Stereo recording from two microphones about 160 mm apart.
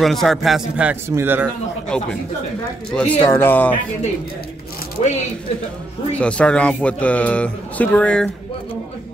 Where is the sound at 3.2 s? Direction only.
15° left (ahead or behind).